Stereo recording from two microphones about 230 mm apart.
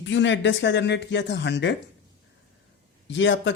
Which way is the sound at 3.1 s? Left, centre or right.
Left.